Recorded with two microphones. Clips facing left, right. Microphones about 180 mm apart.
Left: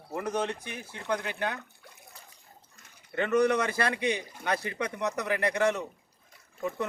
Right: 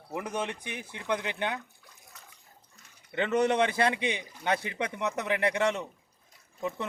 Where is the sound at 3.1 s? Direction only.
25° right (ahead or behind).